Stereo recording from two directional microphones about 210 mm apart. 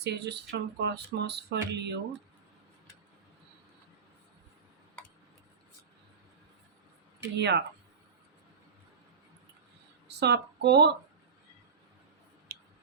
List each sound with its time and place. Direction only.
0.0 s speech: 55° right (ahead or behind)
7.3 s speech: 55° right (ahead or behind)
10.1 s speech: 55° right (ahead or behind)
12.5 s a sound: 50° right (ahead or behind)